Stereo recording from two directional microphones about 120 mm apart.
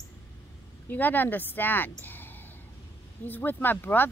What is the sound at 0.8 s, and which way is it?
Speech, 15° left (ahead or behind).